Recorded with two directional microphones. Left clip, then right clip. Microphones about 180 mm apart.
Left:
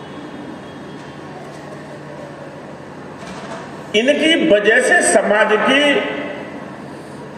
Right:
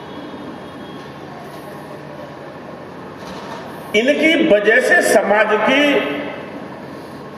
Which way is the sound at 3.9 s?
40° left (ahead or behind).